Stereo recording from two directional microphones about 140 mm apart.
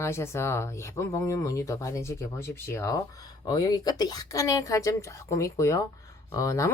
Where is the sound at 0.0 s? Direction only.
20° left (ahead or behind).